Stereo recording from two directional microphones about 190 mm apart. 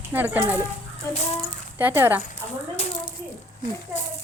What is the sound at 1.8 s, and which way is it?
Speech, 10° right (ahead or behind).